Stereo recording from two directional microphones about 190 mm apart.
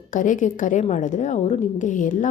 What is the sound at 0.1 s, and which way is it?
Speech, 45° left (ahead or behind).